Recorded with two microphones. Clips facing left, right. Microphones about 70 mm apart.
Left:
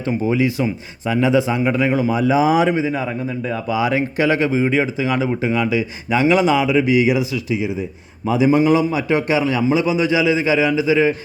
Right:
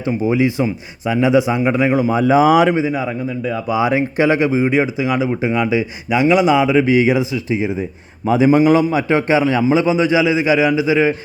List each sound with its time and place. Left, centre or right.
0.3 s a man's voice: centre
2.0 s a man's voice: right
2.5 s speech: right
2.8 s speech: centre
5.4 s a man's voice: right